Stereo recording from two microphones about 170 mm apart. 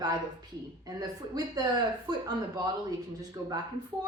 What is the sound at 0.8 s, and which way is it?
Speech, 20° right (ahead or behind).